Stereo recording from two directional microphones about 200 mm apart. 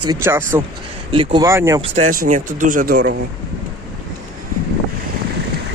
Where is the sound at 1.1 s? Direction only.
25° right (ahead or behind).